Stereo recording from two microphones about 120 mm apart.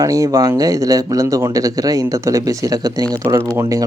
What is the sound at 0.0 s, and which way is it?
Speech, 30° right (ahead or behind).